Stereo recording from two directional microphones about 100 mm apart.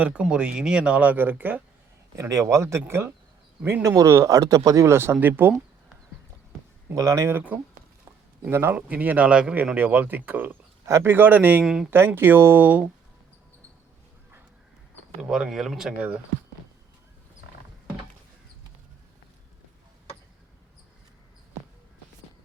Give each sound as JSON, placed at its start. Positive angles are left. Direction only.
{"t": 0.0, "sound": "a man's voice", "side_deg": -10}
{"t": 2.1, "sound": "a man's voice", "side_deg": -30}
{"t": 3.8, "sound": "speech", "side_deg": -30}
{"t": 5.2, "sound": "speech", "side_deg": -20}
{"t": 6.8, "sound": "speech", "side_deg": -30}
{"t": 7.3, "sound": "a man's voice", "side_deg": -20}
{"t": 11.6, "sound": "speech", "side_deg": -5}
{"t": 11.9, "sound": "speech", "side_deg": -25}
{"t": 15.2, "sound": "a man's voice", "side_deg": -5}